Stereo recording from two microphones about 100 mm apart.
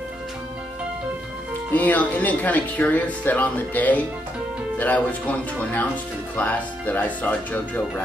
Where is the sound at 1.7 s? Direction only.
15° left (ahead or behind).